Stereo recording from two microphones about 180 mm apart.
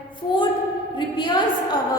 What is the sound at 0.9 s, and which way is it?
Speech, 25° left (ahead or behind).